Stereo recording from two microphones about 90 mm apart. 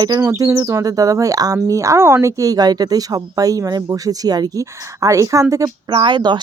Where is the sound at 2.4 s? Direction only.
45° right (ahead or behind).